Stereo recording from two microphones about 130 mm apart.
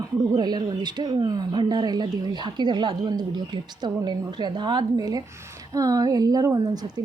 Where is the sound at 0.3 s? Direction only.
30° right (ahead or behind).